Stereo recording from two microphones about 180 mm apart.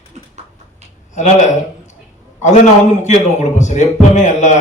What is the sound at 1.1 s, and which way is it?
Speech, 40° left (ahead or behind).